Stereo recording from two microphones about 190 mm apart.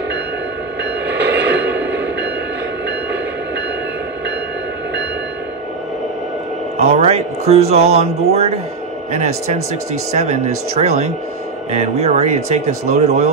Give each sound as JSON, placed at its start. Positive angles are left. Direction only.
{"t": 1.0, "sound": "train", "side_deg": -65}
{"t": 1.5, "sound": "a sound", "side_deg": -65}
{"t": 6.8, "sound": "speech", "side_deg": -35}